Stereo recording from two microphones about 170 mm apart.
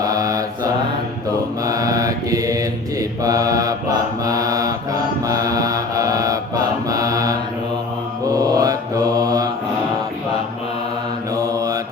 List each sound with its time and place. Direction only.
0.0 s mantra: 20° right (ahead or behind)
11.3 s mantra: 20° right (ahead or behind)